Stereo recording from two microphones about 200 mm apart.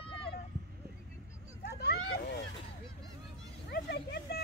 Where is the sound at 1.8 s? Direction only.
55° left (ahead or behind).